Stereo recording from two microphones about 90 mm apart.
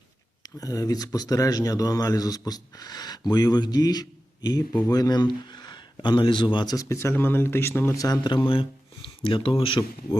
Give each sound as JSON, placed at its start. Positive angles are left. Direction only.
{"t": 0.4, "sound": "speech", "side_deg": 40}
{"t": 6.7, "sound": "speech", "side_deg": 35}
{"t": 7.9, "sound": "speech", "side_deg": 45}
{"t": 9.2, "sound": "speech", "side_deg": 75}